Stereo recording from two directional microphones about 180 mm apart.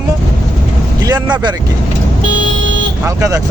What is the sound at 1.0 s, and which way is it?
Speech, 25° right (ahead or behind).